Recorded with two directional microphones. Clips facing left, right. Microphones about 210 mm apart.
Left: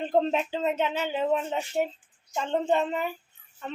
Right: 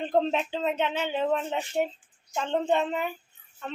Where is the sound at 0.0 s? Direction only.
Centre (ahead or behind).